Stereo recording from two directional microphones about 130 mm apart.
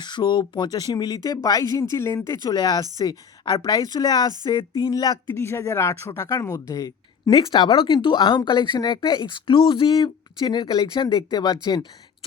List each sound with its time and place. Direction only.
0.0 s speech: 35° left (ahead or behind)